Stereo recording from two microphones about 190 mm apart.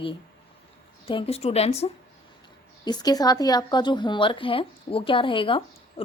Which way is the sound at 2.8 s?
20° left (ahead or behind).